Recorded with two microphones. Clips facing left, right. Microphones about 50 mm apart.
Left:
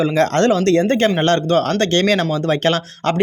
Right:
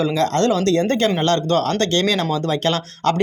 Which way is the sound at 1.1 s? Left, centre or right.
Left.